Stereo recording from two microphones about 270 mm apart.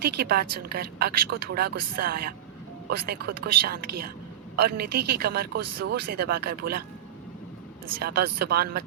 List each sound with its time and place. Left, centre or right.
0.0 s speech: right
8.0 s speech: right